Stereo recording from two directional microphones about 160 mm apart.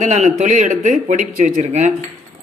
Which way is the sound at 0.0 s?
45° right (ahead or behind).